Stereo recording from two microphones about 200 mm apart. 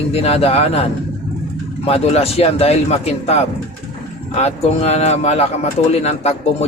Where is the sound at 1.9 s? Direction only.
30° left (ahead or behind).